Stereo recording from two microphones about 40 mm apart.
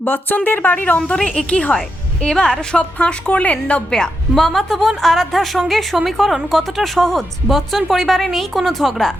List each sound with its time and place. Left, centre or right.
0.0 s speech: left
0.9 s speech: left
2.2 s a woman's voice: centre
2.7 s a woman's voice: left
4.4 s speech: centre